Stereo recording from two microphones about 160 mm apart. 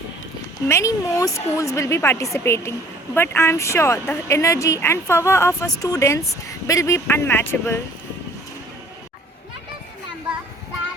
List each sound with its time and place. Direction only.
0.7 s speech: 20° left (ahead or behind)